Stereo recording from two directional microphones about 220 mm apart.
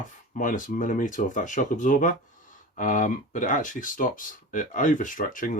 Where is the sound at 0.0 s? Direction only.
35° left (ahead or behind).